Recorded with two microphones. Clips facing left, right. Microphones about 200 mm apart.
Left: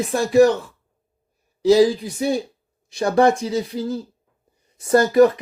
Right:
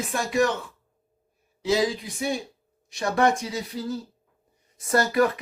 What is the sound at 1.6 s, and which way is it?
Speech, 35° left (ahead or behind).